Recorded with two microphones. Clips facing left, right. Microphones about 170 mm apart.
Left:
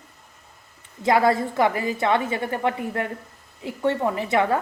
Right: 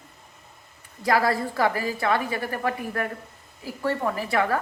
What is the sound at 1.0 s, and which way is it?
A woman's voice, 25° left (ahead or behind).